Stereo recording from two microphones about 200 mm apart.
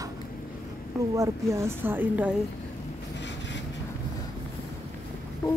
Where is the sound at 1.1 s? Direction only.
15° right (ahead or behind).